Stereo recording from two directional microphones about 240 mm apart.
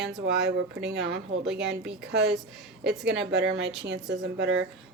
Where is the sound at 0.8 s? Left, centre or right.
Right.